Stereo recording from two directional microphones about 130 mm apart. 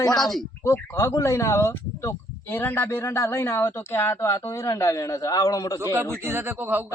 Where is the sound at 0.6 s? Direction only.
20° left (ahead or behind).